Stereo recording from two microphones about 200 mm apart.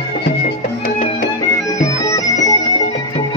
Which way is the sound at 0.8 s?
45° left (ahead or behind).